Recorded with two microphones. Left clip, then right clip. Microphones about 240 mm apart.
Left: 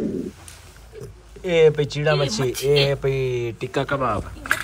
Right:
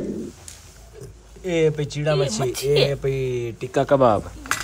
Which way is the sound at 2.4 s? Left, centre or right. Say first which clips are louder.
Left 1 dB; right.